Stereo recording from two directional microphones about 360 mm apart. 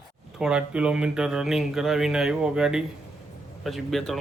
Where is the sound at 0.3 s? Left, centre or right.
Centre.